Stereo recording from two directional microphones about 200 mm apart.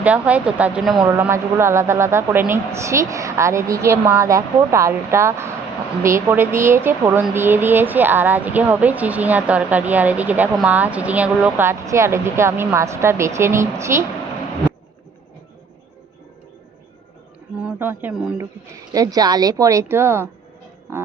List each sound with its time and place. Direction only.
0.0 s speech: 5° right (ahead or behind)
1.0 s speech: 10° right (ahead or behind)
17.6 s speech: 5° right (ahead or behind)
18.9 s speech: 20° right (ahead or behind)